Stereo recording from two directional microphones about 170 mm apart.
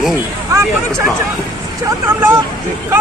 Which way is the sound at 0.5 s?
15° right (ahead or behind).